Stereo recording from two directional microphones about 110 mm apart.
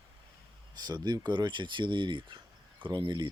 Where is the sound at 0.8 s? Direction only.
40° right (ahead or behind).